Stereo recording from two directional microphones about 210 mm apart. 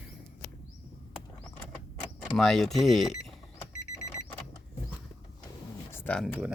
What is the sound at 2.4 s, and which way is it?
Speech, centre (ahead or behind).